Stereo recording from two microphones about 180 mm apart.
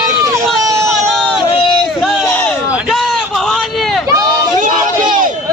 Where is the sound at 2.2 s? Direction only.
5° left (ahead or behind).